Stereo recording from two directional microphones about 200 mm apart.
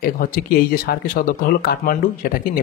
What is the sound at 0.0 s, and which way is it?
Speech, 45° left (ahead or behind).